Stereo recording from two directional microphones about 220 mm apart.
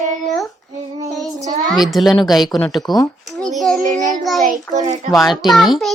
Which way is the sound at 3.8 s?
35° right (ahead or behind).